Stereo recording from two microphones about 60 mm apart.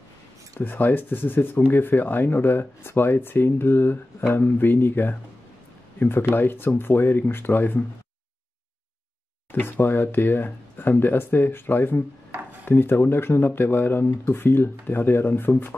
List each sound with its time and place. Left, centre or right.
0.6 s speech: left
9.5 s speech: left